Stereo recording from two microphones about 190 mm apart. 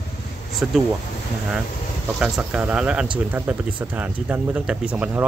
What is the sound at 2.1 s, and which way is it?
A man's voice, 5° right (ahead or behind).